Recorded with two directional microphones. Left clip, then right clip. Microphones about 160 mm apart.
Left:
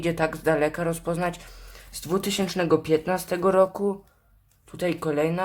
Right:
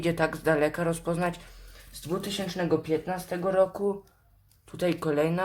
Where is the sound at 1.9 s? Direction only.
35° left (ahead or behind).